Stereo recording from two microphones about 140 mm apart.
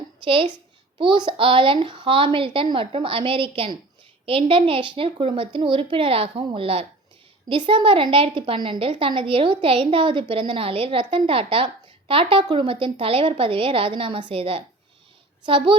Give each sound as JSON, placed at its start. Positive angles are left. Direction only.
{"t": 0.3, "sound": "a woman's voice", "side_deg": -40}